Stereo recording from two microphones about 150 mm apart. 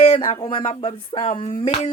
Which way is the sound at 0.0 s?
45° left (ahead or behind).